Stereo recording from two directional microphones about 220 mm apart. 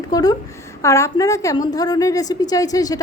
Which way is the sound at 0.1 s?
15° left (ahead or behind).